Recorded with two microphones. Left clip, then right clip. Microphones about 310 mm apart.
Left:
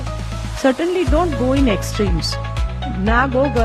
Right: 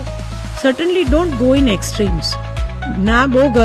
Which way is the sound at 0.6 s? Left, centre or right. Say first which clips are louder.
Right 2 dB; right.